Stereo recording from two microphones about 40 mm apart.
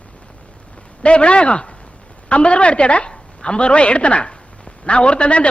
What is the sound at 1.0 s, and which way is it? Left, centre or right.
A man's voice, left.